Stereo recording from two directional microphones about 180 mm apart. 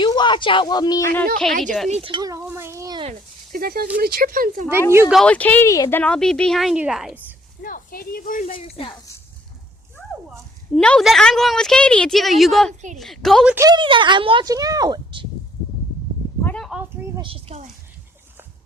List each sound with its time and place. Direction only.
0.0 s speech: 25° left (ahead or behind)
1.9 s dishes: 30° right (ahead or behind)
3.5 s speech: 55° right (ahead or behind)
4.9 s speech: 15° right (ahead or behind)
5.1 s speech: 5° left (ahead or behind)
6.0 s a woman's voice: 5° left (ahead or behind)
7.6 s speech: 50° left (ahead or behind)
8.5 s speech: 30° left (ahead or behind)
10.8 s a woman's voice: 5° left (ahead or behind)
13.6 s speech: 25° right (ahead or behind)
16.4 s a sound: 10° left (ahead or behind)
17.2 s a woman's voice: 35° right (ahead or behind)